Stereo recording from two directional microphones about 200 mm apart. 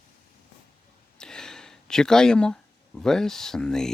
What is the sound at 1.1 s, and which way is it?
Speech, 5° left (ahead or behind).